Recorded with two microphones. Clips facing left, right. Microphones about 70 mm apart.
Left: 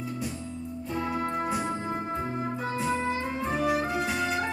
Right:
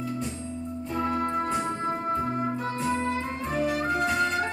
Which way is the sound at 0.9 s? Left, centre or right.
Centre.